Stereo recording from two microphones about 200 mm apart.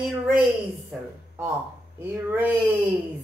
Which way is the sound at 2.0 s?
10° right (ahead or behind).